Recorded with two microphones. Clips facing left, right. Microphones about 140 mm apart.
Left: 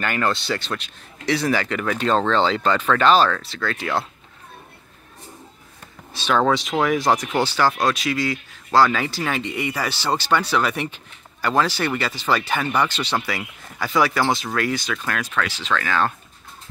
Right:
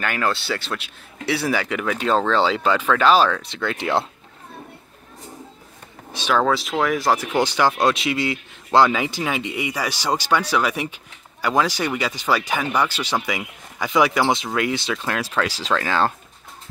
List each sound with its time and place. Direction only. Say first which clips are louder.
0.0 s speech: left 1 dB; 5° right (ahead or behind)
3.4 s speech: right 2 dB; 20° right (ahead or behind)
6.1 s speech: even; 10° right (ahead or behind); by 16.1 s 30° right (ahead or behind)